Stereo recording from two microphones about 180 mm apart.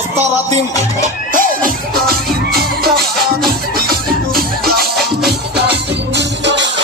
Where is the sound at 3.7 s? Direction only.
55° right (ahead or behind).